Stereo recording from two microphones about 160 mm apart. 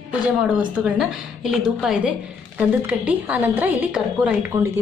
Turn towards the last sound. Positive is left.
turn(degrees=-20)  # may be behind; listen again after turning